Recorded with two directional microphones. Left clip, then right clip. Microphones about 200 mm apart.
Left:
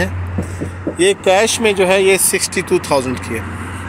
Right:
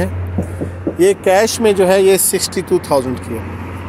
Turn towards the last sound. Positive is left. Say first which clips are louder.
# right 1 dB
turn(degrees=-10)  # may be behind; listen again after turning